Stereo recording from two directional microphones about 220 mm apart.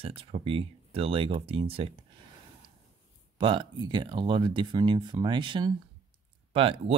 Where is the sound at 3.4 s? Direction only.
20° right (ahead or behind).